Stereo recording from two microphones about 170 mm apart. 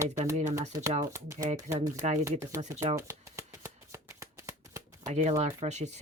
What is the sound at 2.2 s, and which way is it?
Speech, 15° right (ahead or behind).